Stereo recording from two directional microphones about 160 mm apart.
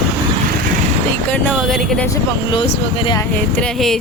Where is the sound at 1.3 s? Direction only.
10° left (ahead or behind).